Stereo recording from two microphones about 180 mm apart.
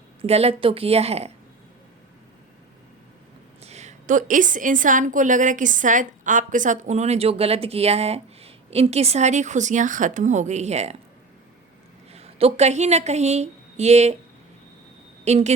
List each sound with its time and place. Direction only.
0.2 s a woman's voice: 35° right (ahead or behind)
3.6 s a woman's voice: 40° right (ahead or behind)
12.1 s a woman's voice: 35° right (ahead or behind)
15.2 s a woman's voice: 40° right (ahead or behind)